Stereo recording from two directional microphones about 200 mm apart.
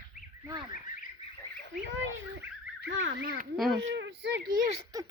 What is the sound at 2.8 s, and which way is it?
Fowl, 70° right (ahead or behind).